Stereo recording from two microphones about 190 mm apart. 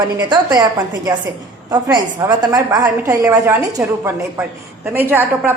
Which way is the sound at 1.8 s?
20° right (ahead or behind).